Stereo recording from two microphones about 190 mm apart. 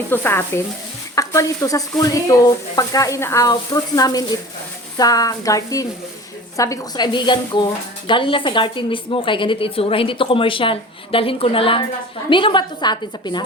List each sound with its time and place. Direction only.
0.1 s a woman's voice: 10° left (ahead or behind)